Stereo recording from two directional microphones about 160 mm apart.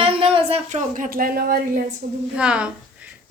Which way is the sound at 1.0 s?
60° right (ahead or behind).